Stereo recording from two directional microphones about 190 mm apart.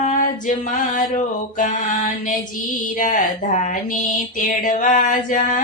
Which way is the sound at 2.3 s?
45° left (ahead or behind).